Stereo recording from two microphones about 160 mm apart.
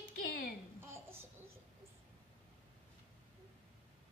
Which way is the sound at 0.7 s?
15° right (ahead or behind).